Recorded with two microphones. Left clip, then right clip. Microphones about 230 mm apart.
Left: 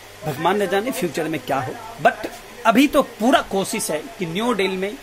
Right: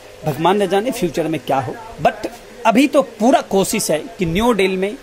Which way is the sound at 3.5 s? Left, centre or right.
Right.